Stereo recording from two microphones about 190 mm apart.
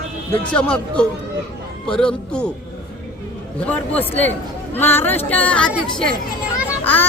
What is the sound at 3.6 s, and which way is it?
Speech, 10° left (ahead or behind).